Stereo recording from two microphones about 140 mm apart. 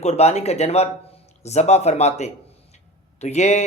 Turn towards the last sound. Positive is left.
turn(degrees=50)  # may be behind; listen again after turning